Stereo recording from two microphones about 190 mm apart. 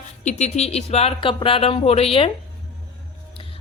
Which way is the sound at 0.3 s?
35° left (ahead or behind).